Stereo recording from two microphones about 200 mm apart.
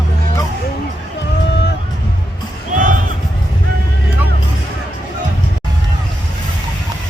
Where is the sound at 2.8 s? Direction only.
40° right (ahead or behind).